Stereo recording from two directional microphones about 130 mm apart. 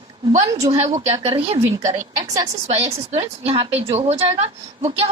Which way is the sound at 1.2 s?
50° right (ahead or behind).